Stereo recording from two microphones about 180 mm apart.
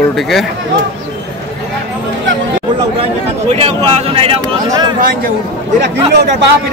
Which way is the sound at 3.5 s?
30° right (ahead or behind).